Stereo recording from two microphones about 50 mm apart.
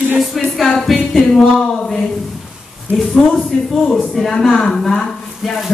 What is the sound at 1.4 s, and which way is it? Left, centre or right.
Speech, centre.